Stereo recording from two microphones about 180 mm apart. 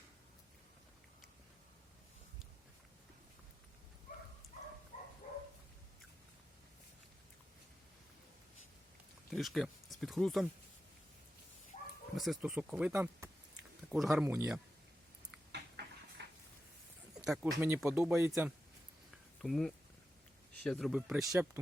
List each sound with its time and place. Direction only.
9.3 s speech: centre (ahead or behind)
12.1 s speech: centre (ahead or behind); by 13.3 s 15° right (ahead or behind)
13.9 s speech: centre (ahead or behind)
14.3 s speech: 15° right (ahead or behind)
15.5 s a sound: 70° right (ahead or behind)
17.2 s speech: 5° right (ahead or behind)
18.1 s speech: centre (ahead or behind)
19.1 s a sound: centre (ahead or behind)
20.6 s speech: 5° left (ahead or behind)
21.1 s speech: 15° right (ahead or behind)